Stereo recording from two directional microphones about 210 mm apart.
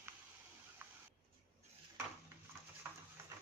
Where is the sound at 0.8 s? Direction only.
10° right (ahead or behind).